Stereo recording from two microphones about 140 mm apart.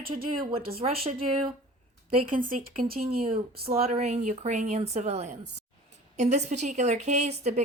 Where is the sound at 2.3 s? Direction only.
85° right.